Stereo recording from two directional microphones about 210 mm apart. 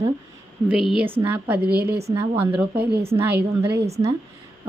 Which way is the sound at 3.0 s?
10° right (ahead or behind).